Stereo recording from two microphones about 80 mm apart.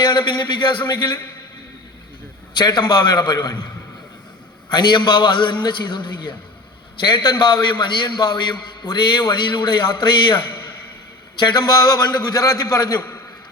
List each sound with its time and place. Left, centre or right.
0.2 s a man's voice: left
2.6 s a man's voice: left
4.7 s a man's voice: left
7.0 s a man's voice: left
11.3 s a man's voice: left